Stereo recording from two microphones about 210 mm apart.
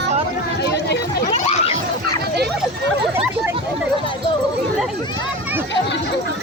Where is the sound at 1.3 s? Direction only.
30° left (ahead or behind).